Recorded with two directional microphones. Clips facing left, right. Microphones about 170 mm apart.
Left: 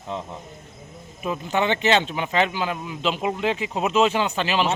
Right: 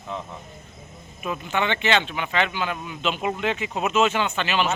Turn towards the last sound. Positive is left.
turn(degrees=35)  # may be behind; listen again after turning